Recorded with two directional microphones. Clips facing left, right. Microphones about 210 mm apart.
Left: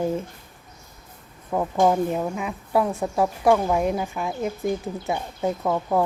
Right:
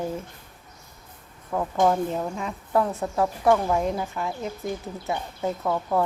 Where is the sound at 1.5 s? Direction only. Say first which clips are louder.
Left 2 dB; 15° left (ahead or behind).